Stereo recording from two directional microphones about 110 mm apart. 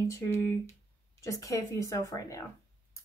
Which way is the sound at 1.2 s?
30° left (ahead or behind).